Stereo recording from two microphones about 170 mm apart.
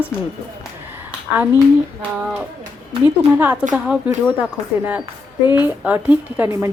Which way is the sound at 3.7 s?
5° right (ahead or behind).